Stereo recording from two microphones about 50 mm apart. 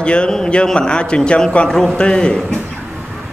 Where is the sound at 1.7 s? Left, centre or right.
Centre.